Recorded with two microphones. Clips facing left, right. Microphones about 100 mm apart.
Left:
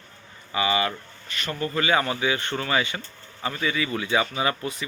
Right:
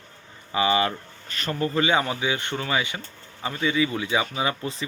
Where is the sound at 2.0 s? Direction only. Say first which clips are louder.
Left 1 dB; 15° right (ahead or behind).